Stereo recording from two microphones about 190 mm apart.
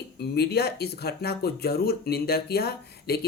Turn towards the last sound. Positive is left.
turn(degrees=55)  # may be behind; listen again after turning